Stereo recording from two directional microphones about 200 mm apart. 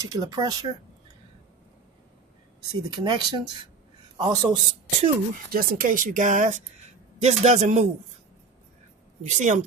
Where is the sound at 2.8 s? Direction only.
20° right (ahead or behind).